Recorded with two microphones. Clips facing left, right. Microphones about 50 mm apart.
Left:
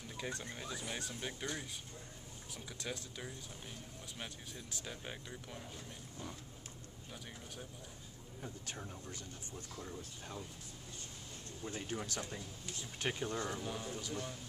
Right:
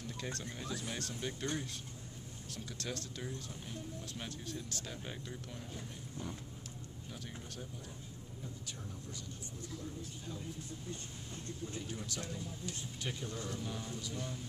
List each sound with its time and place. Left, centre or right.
0.2 s speech: centre
2.5 s speech: centre
8.4 s a man's voice: left
11.6 s speech: left
13.6 s speech: centre